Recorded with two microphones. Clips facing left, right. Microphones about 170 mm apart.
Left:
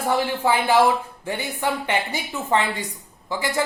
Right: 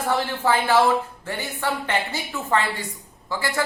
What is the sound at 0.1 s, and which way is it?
A man's voice, 15° left (ahead or behind).